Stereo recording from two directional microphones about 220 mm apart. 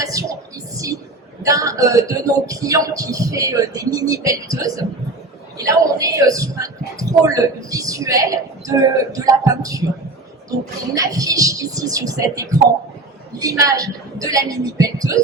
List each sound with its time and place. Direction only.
0.0 s a sound: 15° right (ahead or behind)
1.4 s a man's voice: 15° right (ahead or behind)
10.9 s a man's voice: 15° right (ahead or behind)